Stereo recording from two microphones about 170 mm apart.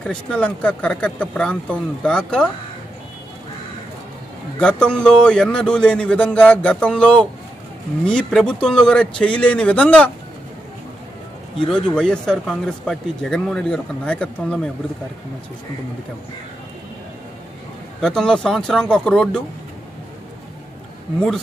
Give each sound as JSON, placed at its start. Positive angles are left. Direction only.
{"t": 0.0, "sound": "speech", "side_deg": 5}
{"t": 4.6, "sound": "speech", "side_deg": 5}
{"t": 11.6, "sound": "speech", "side_deg": 5}
{"t": 18.0, "sound": "speech", "side_deg": 5}